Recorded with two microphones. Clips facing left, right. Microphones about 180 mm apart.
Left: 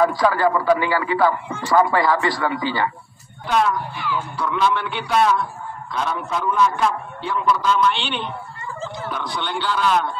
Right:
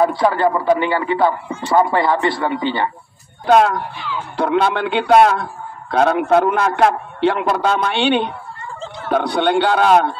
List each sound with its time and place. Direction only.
0.0 s speech: 25° right (ahead or behind)
3.4 s speech: 80° right
4.4 s a man's voice: 65° right (ahead or behind)
9.1 s a man's voice: 65° right (ahead or behind)